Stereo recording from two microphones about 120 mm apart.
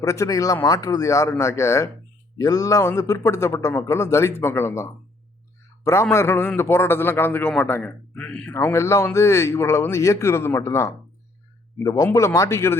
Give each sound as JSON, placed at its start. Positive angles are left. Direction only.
{"t": 0.0, "sound": "a man's voice", "side_deg": 25}
{"t": 8.5, "sound": "a man's voice", "side_deg": 25}